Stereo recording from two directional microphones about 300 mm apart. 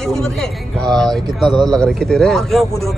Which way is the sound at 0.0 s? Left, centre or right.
Centre.